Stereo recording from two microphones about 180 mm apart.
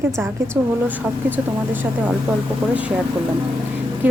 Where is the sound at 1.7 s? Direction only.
10° right (ahead or behind).